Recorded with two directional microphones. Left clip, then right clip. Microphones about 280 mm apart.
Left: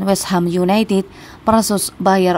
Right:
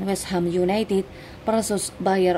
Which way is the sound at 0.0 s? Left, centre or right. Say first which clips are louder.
Left 8 dB; left.